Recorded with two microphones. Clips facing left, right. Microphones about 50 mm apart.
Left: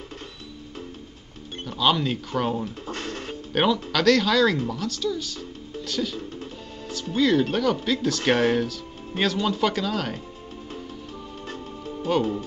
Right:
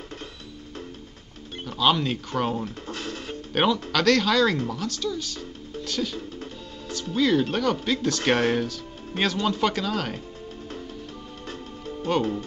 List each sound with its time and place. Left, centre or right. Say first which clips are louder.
1.7 s speech: even; centre
2.9 s music: left 1 dB; left
3.5 s speech: even; centre
7.2 s speech: left 1 dB; centre
12.1 s speech: left 1 dB; centre